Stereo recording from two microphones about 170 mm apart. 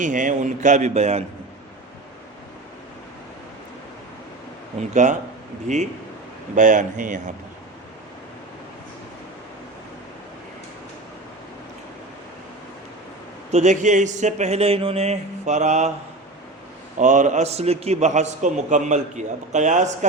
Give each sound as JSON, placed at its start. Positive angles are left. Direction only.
{"t": 0.0, "sound": "a man's voice", "side_deg": -50}
{"t": 5.0, "sound": "a man's voice", "side_deg": -45}
{"t": 13.5, "sound": "a man's voice", "side_deg": -45}
{"t": 17.0, "sound": "a man's voice", "side_deg": -45}